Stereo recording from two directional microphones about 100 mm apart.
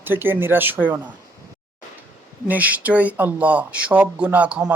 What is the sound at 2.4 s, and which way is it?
Speech, 15° right (ahead or behind).